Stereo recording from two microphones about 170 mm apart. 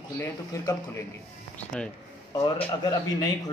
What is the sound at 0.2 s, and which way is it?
Speech, 15° left (ahead or behind).